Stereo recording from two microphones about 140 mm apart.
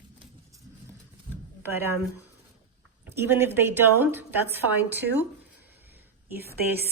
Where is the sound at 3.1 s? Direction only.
15° right (ahead or behind).